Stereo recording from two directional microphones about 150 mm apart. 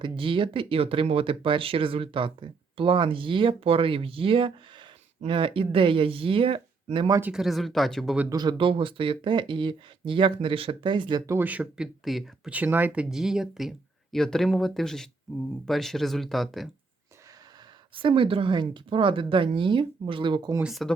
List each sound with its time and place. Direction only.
0.0 s speech: 35° right (ahead or behind)
7.1 s speech: 10° right (ahead or behind)
8.3 s speech: 30° right (ahead or behind)
11.3 s speech: 10° right (ahead or behind)
17.9 s speech: 35° right (ahead or behind)
20.6 s speech: centre (ahead or behind)